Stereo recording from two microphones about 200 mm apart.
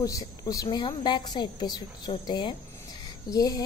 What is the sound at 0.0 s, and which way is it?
A woman's voice, 15° left (ahead or behind).